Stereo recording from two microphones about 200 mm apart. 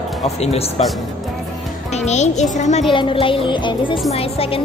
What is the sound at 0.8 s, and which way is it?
Speech, 30° left (ahead or behind).